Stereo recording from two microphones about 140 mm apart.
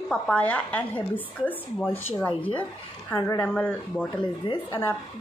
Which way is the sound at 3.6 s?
10° left (ahead or behind).